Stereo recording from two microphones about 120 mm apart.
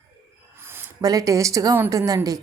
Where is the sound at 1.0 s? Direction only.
30° right (ahead or behind).